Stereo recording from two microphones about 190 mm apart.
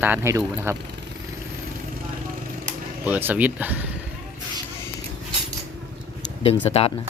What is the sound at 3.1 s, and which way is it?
Speech, 10° right (ahead or behind).